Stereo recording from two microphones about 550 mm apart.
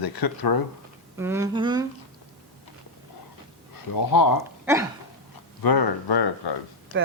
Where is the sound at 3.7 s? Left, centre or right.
Left.